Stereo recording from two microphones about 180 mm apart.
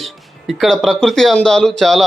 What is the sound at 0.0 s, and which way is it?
A man's voice, centre (ahead or behind).